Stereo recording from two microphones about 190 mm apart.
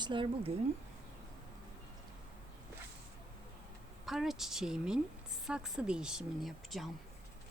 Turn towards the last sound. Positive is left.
turn(degrees=0)  # may be behind; listen again after turning